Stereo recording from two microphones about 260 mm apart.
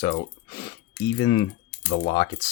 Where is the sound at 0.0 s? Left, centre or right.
Centre.